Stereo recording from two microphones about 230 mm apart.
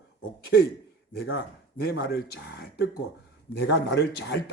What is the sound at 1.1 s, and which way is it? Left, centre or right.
Speech, left.